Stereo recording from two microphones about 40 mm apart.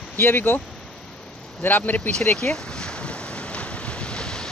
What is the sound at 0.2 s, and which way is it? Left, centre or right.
Speech, left.